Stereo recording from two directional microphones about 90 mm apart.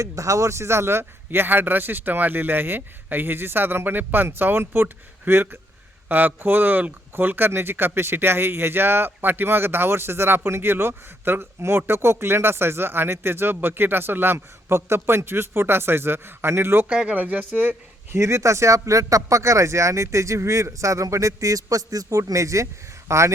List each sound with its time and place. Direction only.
0.0 s speech: 35° right (ahead or behind)
16.9 s speech: 15° right (ahead or behind)
18.2 s speech: 35° right (ahead or behind)